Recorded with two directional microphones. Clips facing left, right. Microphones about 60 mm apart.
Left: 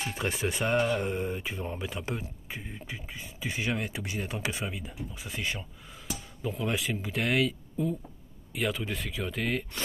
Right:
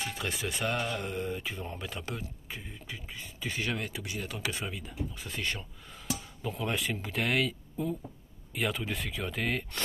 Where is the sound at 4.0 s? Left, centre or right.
Left; by 9.8 s centre.